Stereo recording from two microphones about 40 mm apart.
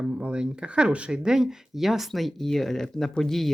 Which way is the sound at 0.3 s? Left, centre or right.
Right.